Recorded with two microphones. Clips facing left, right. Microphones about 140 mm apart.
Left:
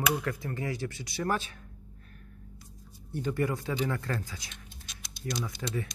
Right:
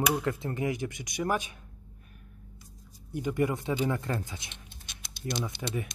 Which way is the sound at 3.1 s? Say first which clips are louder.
Right 2 dB; 15° right (ahead or behind).